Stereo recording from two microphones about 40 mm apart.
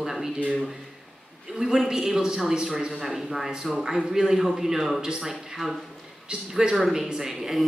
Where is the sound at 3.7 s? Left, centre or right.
Centre.